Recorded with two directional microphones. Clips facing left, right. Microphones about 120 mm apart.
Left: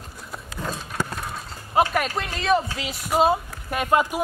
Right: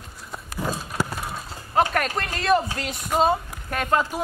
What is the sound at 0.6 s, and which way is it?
Clip-clop, 5° right (ahead or behind).